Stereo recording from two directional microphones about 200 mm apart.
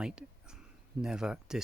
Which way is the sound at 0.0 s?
5° right (ahead or behind).